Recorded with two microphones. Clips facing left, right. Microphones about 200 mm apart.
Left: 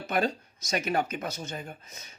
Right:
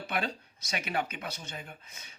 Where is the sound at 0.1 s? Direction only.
45° left (ahead or behind).